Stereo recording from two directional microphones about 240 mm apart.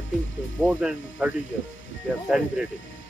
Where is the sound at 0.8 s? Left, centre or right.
Centre.